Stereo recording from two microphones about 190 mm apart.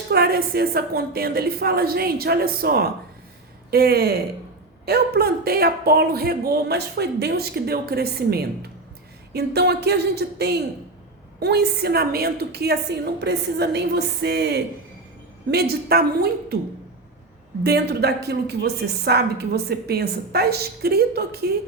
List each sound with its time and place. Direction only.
0.1 s a woman's voice: 55° right (ahead or behind)
17.6 s a woman's voice: 60° right (ahead or behind)